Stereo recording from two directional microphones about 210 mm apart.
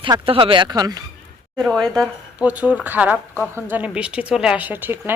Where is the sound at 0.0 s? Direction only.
25° right (ahead or behind).